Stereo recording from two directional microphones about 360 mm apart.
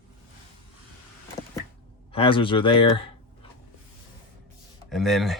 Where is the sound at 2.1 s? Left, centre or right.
Centre.